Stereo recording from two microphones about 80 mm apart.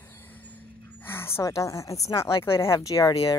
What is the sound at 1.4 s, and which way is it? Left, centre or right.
A woman's voice, left.